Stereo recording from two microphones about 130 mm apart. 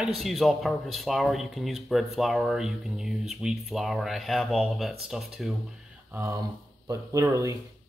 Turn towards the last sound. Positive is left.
turn(degrees=-25)  # may be behind; listen again after turning